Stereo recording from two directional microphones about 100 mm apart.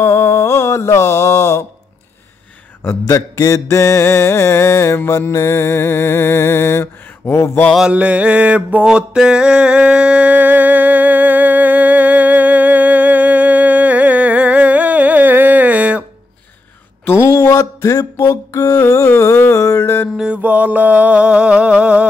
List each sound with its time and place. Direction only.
0.0 s mantra: 25° left (ahead or behind)
2.8 s mantra: 30° left (ahead or behind)
7.7 s mantra: 10° right (ahead or behind)
17.0 s a sound: 25° left (ahead or behind)
19.1 s mantra: 25° left (ahead or behind)
20.4 s mantra: 15° right (ahead or behind)